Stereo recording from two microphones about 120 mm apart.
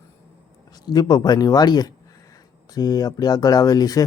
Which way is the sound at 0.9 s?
35° left (ahead or behind).